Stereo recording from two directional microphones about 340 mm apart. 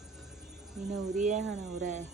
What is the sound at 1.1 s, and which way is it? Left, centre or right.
Hum, right.